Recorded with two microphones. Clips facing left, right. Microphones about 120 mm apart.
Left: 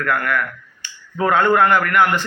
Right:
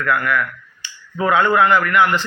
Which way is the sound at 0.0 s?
50° left (ahead or behind).